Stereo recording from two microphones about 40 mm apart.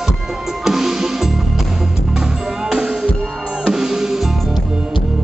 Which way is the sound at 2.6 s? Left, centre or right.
Centre.